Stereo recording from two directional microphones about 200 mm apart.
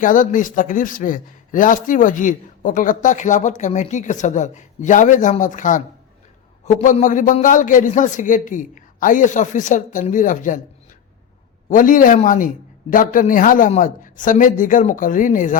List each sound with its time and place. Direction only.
0.0 s a man's voice: 40° left (ahead or behind)
11.7 s a man's voice: 40° left (ahead or behind)